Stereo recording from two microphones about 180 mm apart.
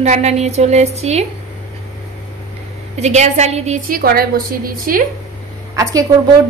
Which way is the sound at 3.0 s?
40° right (ahead or behind).